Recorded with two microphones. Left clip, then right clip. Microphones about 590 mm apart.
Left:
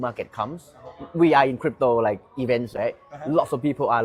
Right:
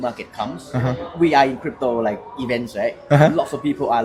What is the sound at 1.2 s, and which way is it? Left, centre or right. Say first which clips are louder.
Speech: right 2 dB; left.